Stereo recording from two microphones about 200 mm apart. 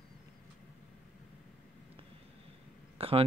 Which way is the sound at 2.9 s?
30° right (ahead or behind).